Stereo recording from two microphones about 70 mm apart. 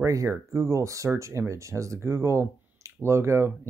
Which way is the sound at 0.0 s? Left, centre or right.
Right.